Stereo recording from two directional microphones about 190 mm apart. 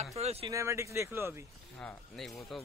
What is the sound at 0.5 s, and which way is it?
Speech, 15° right (ahead or behind).